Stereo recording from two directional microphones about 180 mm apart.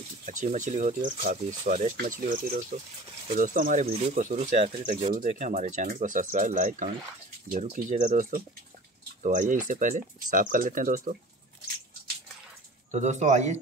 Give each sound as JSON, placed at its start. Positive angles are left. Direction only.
{"t": 0.3, "sound": "speech", "side_deg": -45}
{"t": 3.8, "sound": "speech", "side_deg": -35}
{"t": 12.9, "sound": "speech", "side_deg": -40}